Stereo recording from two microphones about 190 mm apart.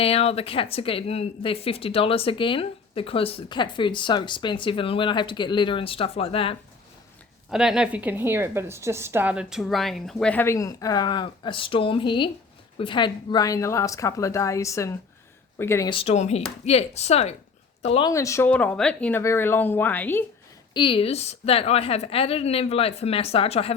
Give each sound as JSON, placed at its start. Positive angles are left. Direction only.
{"t": 0.0, "sound": "speech", "side_deg": 30}
{"t": 7.5, "sound": "a woman's voice", "side_deg": -5}
{"t": 15.9, "sound": "a woman's voice", "side_deg": 30}
{"t": 18.1, "sound": "a woman's voice", "side_deg": 15}
{"t": 20.7, "sound": "a woman's voice", "side_deg": 25}